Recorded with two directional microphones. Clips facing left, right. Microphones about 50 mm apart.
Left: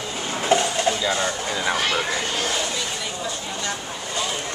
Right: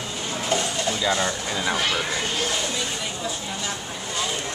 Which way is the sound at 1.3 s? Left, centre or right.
Centre.